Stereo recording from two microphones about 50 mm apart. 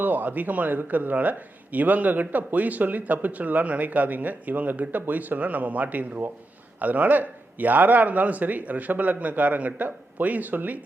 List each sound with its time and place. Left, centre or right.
0.0 s a man's voice: right